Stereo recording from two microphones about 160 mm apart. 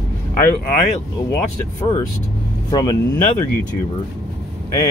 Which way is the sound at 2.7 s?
25° left (ahead or behind).